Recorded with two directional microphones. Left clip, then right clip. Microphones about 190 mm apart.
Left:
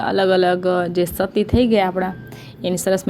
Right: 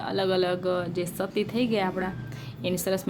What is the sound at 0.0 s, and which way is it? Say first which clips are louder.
Speech: left 10 dB; 30° left (ahead or behind).